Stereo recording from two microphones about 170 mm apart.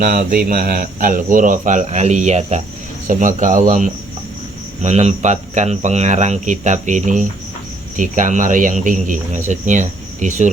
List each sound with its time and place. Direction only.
0.0 s speech: 50° right (ahead or behind)